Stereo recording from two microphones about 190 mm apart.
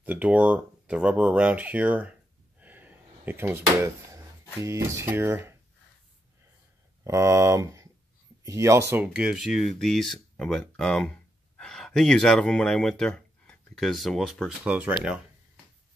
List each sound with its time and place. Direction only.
0.0 s speech: 10° right (ahead or behind)
2.6 s a sound: 10° right (ahead or behind)
7.1 s speech: 15° right (ahead or behind)